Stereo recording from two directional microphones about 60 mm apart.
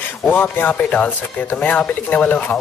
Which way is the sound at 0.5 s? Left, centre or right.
Left.